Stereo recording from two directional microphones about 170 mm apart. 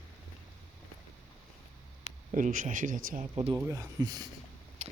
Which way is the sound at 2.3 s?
50° right (ahead or behind).